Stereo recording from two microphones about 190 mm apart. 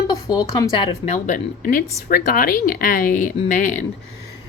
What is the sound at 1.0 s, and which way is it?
Speech, 40° left (ahead or behind).